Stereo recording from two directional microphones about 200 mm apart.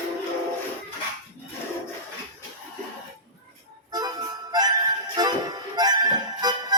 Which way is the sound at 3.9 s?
20° right (ahead or behind).